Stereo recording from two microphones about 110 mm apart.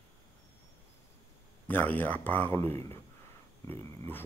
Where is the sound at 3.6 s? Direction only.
20° left (ahead or behind).